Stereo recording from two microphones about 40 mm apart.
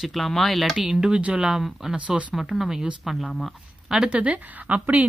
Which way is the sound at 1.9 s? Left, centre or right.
Right.